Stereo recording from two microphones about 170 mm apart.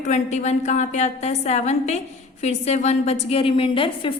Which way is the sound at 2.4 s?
40° left (ahead or behind).